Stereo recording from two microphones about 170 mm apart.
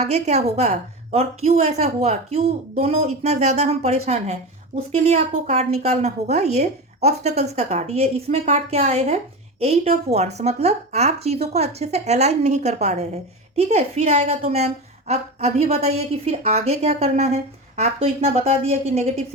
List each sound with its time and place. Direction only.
0.0 s a woman's voice: 40° right (ahead or behind)